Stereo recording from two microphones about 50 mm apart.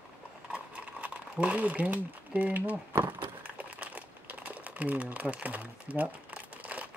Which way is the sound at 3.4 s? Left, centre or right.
Right.